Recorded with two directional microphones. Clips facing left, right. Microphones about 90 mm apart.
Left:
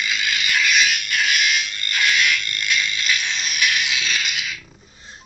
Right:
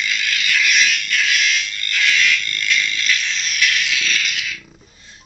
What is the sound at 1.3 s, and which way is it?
Frog, 15° left (ahead or behind).